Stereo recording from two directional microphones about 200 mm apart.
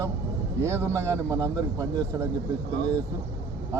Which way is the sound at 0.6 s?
15° right (ahead or behind).